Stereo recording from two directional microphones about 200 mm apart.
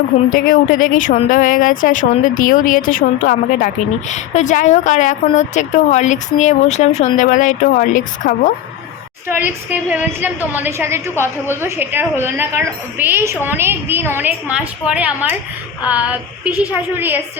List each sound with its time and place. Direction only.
0.3 s speech: 40° left (ahead or behind)
9.3 s a woman's voice: 10° right (ahead or behind)